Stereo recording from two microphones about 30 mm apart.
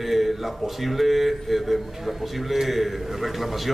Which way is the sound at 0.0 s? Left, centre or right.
Centre.